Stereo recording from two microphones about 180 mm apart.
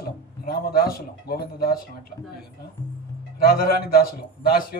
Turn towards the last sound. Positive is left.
turn(degrees=55)  # may be behind; listen again after turning